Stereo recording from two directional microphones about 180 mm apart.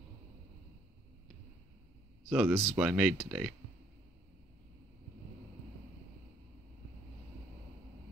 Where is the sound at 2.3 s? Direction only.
10° right (ahead or behind).